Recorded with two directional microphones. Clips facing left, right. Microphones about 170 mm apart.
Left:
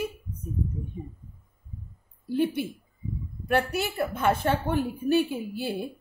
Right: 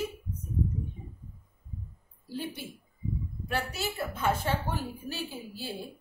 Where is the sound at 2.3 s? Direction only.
60° left (ahead or behind).